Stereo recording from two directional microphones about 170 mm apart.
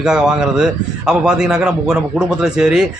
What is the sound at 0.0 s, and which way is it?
A man's voice, 5° right (ahead or behind).